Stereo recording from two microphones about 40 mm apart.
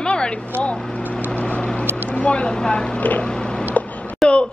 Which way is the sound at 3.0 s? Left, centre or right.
Left.